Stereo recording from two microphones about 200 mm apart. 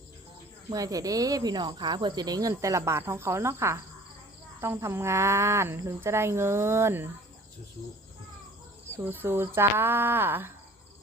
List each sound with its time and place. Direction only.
0.7 s speech: 20° right (ahead or behind)
9.0 s speech: 10° right (ahead or behind)